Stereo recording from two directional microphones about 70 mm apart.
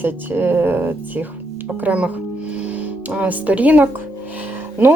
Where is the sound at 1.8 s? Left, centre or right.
Centre.